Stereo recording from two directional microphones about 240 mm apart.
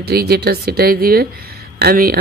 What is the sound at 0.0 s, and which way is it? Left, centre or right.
Speech, right.